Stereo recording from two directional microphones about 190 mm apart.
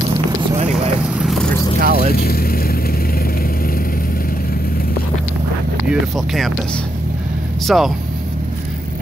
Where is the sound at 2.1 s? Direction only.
50° left (ahead or behind).